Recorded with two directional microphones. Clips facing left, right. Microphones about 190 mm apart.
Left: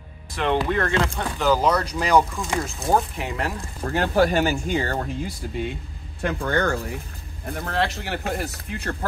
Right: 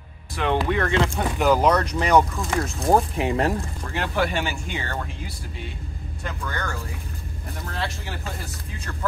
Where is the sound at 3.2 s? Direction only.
25° right (ahead or behind).